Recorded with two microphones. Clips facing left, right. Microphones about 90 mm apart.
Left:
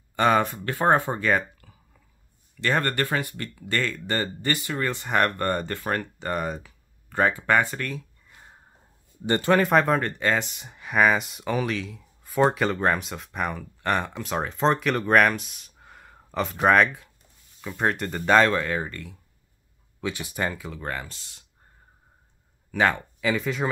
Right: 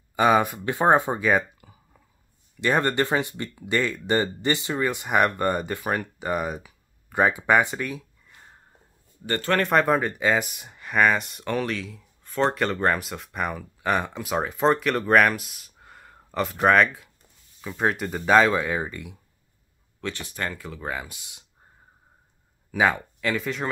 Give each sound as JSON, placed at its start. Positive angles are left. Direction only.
{"t": 0.1, "sound": "speech", "side_deg": -10}
{"t": 0.7, "sound": "speech", "side_deg": -15}
{"t": 8.3, "sound": "a sound", "side_deg": 5}
{"t": 9.2, "sound": "a man's voice", "side_deg": 20}
{"t": 9.6, "sound": "speech", "side_deg": 0}
{"t": 20.0, "sound": "speech", "side_deg": 10}
{"t": 22.7, "sound": "speech", "side_deg": -5}